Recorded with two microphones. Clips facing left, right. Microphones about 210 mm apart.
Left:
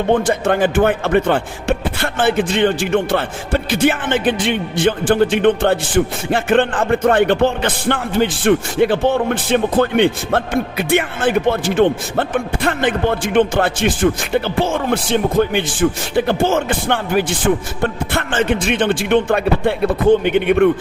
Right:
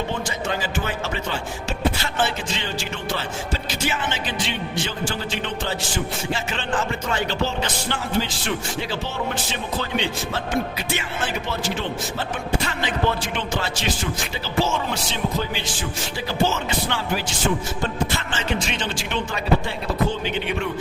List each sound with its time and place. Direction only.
0.1 s speech: 55° left (ahead or behind)